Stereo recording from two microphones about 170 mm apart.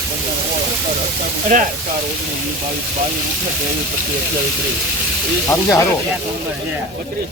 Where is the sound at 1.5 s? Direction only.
50° right (ahead or behind).